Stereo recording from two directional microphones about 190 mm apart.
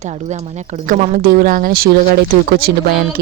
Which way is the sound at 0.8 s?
45° right (ahead or behind).